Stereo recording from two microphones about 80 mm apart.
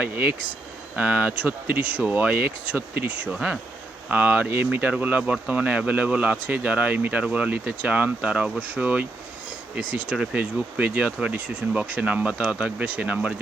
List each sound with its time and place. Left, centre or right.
0.0 s speech: right
3.3 s speech: centre